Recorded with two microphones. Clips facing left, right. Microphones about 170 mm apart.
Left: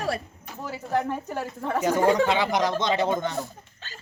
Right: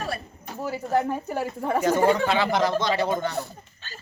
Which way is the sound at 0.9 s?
10° right (ahead or behind).